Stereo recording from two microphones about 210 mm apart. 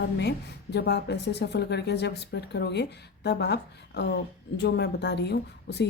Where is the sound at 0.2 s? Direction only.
50° left (ahead or behind).